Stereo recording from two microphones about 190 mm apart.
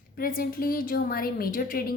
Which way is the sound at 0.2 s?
50° left (ahead or behind).